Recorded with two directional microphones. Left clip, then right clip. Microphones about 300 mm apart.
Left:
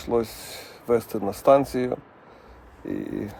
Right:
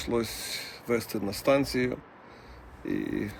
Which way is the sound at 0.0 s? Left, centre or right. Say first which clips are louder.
Left 5 dB; centre.